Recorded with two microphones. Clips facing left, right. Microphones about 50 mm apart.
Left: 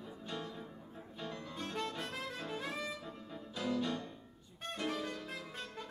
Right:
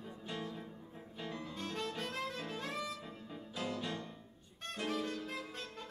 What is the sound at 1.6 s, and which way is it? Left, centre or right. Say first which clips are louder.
Music: left 1 dB; centre.